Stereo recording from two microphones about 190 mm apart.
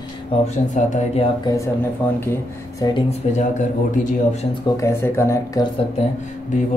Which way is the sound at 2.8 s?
25° left (ahead or behind).